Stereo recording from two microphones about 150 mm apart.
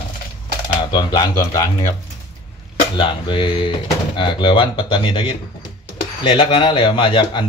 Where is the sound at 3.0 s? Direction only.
35° left (ahead or behind).